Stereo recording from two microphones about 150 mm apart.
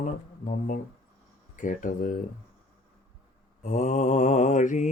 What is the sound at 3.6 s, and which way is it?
Speech, 55° left (ahead or behind).